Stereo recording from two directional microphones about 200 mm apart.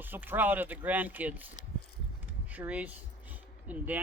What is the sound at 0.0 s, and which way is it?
Speech, 10° right (ahead or behind).